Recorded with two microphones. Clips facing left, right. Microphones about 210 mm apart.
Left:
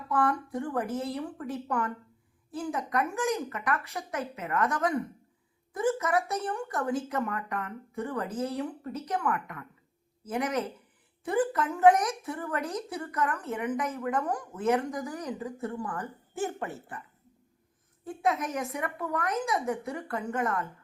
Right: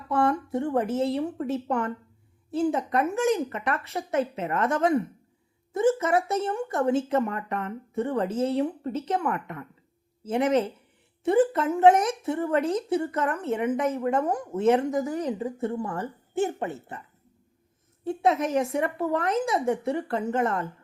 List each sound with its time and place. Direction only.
0.1 s speech: 25° right (ahead or behind)
18.0 s speech: 30° right (ahead or behind)